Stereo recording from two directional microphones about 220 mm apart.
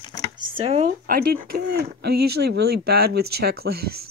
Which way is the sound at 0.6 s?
30° right (ahead or behind).